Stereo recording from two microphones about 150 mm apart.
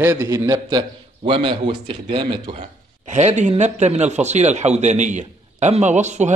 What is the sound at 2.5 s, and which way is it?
Speech, 50° right (ahead or behind).